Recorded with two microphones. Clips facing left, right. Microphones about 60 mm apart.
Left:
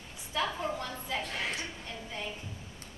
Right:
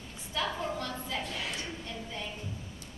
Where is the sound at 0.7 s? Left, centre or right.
Centre.